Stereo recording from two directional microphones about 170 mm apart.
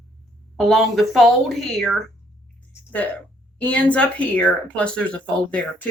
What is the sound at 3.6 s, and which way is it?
A woman's voice, 10° left (ahead or behind).